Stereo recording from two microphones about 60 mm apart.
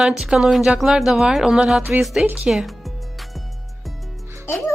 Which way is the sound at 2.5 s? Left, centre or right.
Centre.